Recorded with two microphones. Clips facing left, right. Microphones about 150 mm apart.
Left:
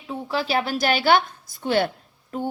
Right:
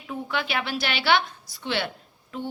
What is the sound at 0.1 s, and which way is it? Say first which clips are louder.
A woman's voice: left 4 dB; 35° left (ahead or behind).